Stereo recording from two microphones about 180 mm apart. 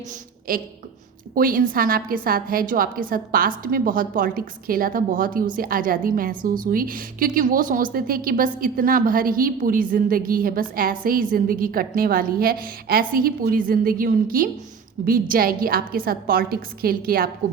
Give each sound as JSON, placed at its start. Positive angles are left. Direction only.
{"t": 0.5, "sound": "a woman's voice", "side_deg": -55}